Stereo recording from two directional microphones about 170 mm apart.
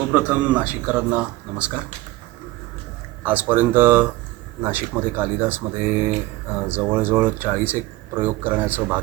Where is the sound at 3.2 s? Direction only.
10° right (ahead or behind).